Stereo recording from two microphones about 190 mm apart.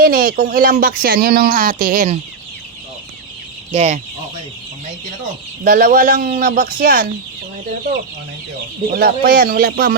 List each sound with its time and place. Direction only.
0.0 s speech: 50° right (ahead or behind)
3.7 s speech: 35° right (ahead or behind)
5.6 s speech: 50° right (ahead or behind)
8.9 s speech: 55° right (ahead or behind)